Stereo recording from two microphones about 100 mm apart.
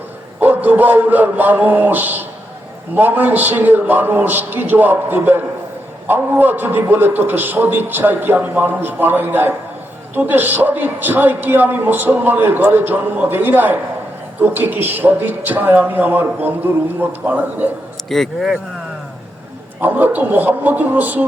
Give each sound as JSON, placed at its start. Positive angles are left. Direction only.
{"t": 0.3, "sound": "a man's voice", "side_deg": -15}
{"t": 18.1, "sound": "speech", "side_deg": 0}
{"t": 19.8, "sound": "speech", "side_deg": -20}